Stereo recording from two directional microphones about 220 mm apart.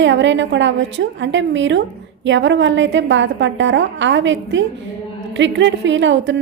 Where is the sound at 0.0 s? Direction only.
55° right (ahead or behind).